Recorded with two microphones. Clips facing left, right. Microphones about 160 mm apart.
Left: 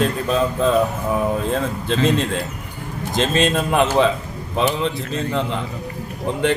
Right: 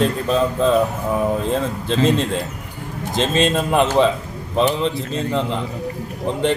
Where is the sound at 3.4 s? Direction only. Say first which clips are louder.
Right 2 dB; centre (ahead or behind).